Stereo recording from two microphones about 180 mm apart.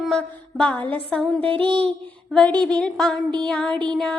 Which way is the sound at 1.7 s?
25° right (ahead or behind).